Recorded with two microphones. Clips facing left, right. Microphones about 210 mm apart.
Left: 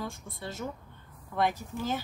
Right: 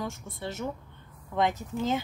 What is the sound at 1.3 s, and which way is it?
Speech, 20° right (ahead or behind).